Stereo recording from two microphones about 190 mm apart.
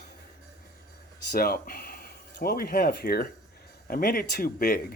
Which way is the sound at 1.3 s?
50° left (ahead or behind).